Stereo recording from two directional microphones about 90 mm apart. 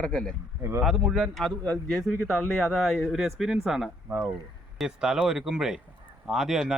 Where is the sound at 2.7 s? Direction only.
Centre (ahead or behind).